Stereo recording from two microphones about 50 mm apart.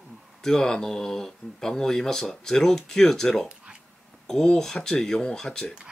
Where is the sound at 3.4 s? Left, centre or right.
Right.